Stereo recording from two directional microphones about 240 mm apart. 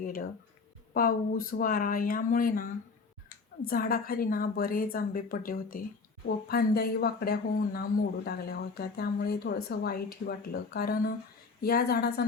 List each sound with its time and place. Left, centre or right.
0.0 s speech: left
3.7 s speech: left